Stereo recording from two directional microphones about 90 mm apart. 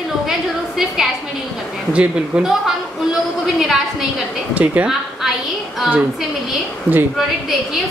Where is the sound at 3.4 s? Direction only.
5° right (ahead or behind).